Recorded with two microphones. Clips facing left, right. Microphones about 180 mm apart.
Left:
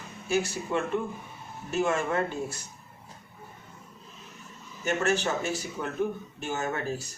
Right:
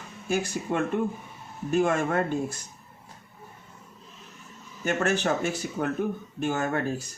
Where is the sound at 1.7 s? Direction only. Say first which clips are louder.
Right 3 dB; 50° right (ahead or behind).